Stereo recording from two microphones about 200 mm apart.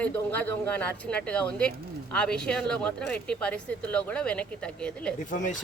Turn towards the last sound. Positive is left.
turn(degrees=40)  # may be behind; listen again after turning